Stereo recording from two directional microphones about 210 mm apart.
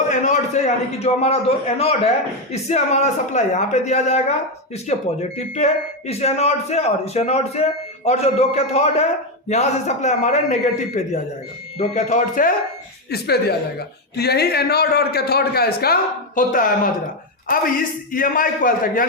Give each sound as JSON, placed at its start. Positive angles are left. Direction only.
{"t": 0.1, "sound": "a man's voice", "side_deg": 35}
{"t": 18.1, "sound": "speech", "side_deg": 40}